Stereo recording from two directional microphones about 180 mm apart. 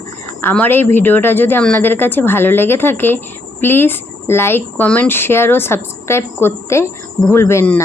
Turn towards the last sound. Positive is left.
turn(degrees=15)  # may be behind; listen again after turning